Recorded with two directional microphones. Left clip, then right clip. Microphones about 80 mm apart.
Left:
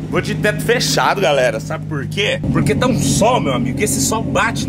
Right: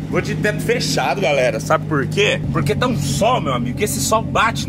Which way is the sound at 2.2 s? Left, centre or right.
Centre.